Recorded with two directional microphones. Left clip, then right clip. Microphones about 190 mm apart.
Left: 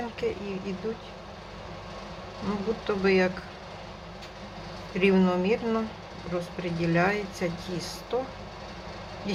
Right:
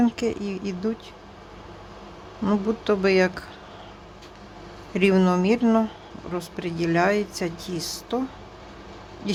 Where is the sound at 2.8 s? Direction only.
55° right (ahead or behind).